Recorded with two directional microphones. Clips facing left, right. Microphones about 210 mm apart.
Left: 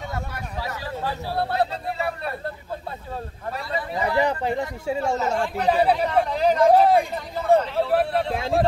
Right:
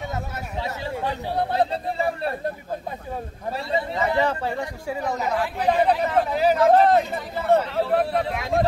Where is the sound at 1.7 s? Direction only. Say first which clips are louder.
Right 3 dB; 30° right (ahead or behind).